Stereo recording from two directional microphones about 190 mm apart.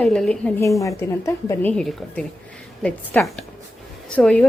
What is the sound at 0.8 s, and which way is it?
Speech, 15° left (ahead or behind).